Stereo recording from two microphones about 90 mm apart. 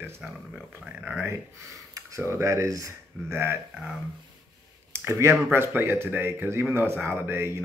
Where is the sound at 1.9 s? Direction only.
35° right (ahead or behind).